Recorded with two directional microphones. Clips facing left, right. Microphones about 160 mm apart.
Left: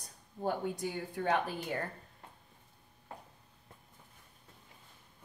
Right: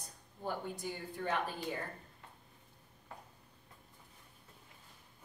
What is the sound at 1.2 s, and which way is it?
Speech, 70° left (ahead or behind).